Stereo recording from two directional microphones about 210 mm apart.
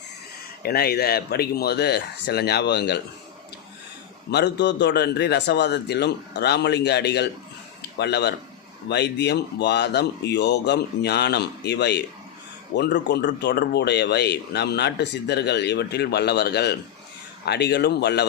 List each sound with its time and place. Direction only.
0.6 s speech: 45° left (ahead or behind)
4.3 s speech: 55° left (ahead or behind)
7.8 s a sound: 50° left (ahead or behind)
8.9 s speech: 50° left (ahead or behind)